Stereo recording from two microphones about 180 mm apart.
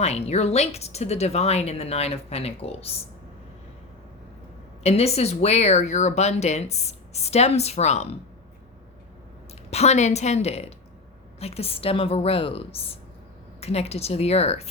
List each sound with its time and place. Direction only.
0.0 s speech: 35° left (ahead or behind)
4.8 s speech: 35° left (ahead or behind)
9.6 s speech: 35° left (ahead or behind)